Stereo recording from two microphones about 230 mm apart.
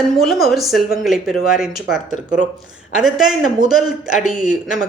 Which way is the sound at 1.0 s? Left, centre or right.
Centre.